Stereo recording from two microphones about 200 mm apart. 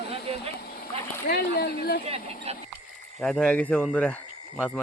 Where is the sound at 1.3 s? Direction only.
50° left (ahead or behind).